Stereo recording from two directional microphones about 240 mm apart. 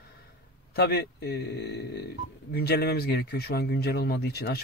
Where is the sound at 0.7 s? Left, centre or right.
Left.